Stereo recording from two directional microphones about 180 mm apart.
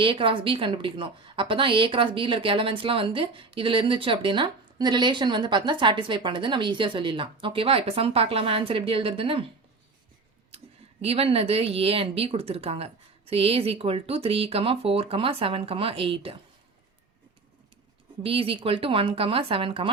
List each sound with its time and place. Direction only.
0.0 s a woman's voice: 30° right (ahead or behind)
11.0 s speech: 35° right (ahead or behind)
18.2 s a woman's voice: 30° right (ahead or behind)